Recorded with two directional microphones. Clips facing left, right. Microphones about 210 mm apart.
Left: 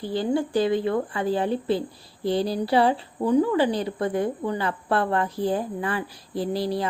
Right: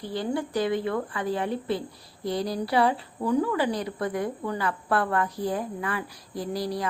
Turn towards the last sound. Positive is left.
turn(degrees=25)  # may be behind; listen again after turning